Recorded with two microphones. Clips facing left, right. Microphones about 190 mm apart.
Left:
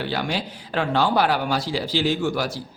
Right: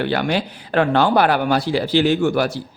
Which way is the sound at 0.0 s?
60° right (ahead or behind).